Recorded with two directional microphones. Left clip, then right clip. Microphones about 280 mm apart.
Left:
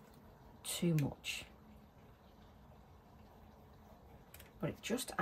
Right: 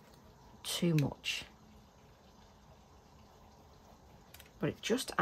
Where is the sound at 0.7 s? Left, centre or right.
Right.